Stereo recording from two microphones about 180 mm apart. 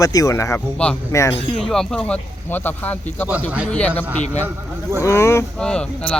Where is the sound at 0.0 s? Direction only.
20° left (ahead or behind).